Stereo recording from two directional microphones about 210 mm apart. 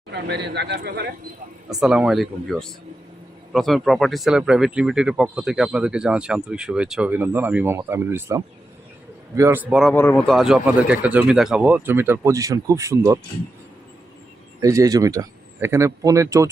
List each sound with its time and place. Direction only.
0.1 s a man's voice: 55° right (ahead or behind)
1.8 s speech: 5° right (ahead or behind)
9.9 s speech: 10° left (ahead or behind); by 13.1 s 15° right (ahead or behind)
14.6 s speech: 15° right (ahead or behind)